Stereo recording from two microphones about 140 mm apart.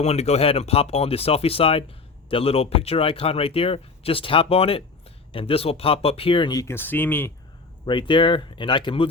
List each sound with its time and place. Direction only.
0.0 s speech: 50° left (ahead or behind); by 7.3 s 15° left (ahead or behind)
7.9 s speech: 35° left (ahead or behind)